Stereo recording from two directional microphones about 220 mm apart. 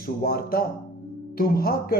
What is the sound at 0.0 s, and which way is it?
Speech, 45° left (ahead or behind).